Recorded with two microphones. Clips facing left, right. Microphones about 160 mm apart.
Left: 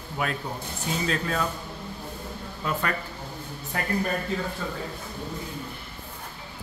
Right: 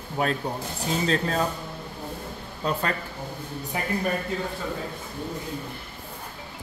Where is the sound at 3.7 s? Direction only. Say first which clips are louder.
Even; 15° right (ahead or behind).